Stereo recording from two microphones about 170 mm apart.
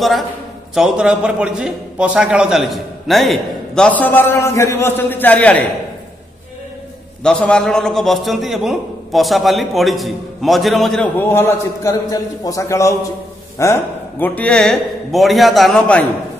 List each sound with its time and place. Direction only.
0.7 s a man's voice: 5° right (ahead or behind)
7.2 s a man's voice: 5° left (ahead or behind)
11.1 s a man's voice: 15° left (ahead or behind)